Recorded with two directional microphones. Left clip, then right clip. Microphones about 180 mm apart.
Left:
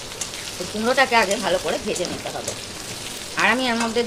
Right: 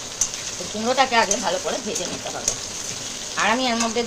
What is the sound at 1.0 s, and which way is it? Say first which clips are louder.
Stir: left 1 dB; 20° left (ahead or behind).